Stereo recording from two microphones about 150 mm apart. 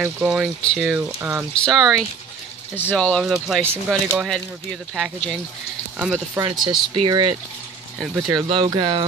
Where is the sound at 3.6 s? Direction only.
10° right (ahead or behind).